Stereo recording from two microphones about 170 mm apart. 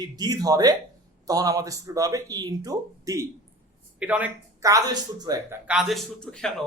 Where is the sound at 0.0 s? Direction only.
20° right (ahead or behind).